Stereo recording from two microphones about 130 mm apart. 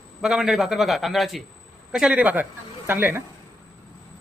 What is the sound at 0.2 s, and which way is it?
A man's voice, 5° right (ahead or behind).